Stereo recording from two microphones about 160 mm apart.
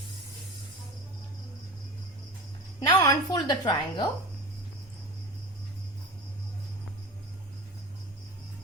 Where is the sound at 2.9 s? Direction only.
25° left (ahead or behind).